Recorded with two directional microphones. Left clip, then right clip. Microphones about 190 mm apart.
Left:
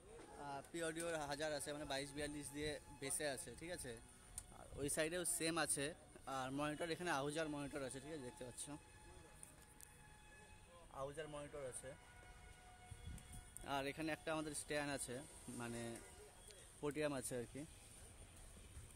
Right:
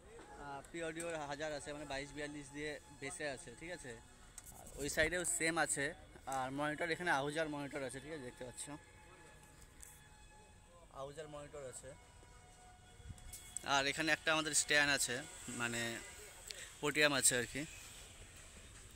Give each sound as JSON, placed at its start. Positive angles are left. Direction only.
{"t": 0.4, "sound": "speech", "side_deg": 10}
{"t": 11.0, "sound": "speech", "side_deg": 35}
{"t": 13.7, "sound": "speech", "side_deg": 5}